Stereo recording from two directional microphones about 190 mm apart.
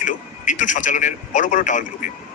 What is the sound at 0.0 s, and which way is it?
A man's voice, 40° left (ahead or behind).